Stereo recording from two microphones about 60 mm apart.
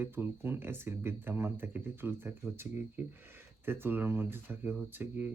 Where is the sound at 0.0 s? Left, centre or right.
Right.